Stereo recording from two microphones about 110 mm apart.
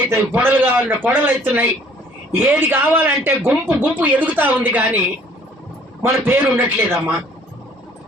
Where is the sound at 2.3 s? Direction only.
20° right (ahead or behind).